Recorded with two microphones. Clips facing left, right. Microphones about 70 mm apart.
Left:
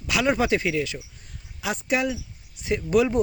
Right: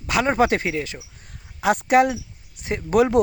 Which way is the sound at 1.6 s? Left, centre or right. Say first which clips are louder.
Right 8 dB; right.